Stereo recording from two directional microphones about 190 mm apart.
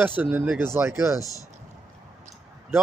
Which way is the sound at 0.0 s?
10° right (ahead or behind).